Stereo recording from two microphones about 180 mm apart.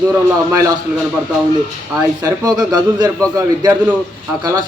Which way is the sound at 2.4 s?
20° right (ahead or behind).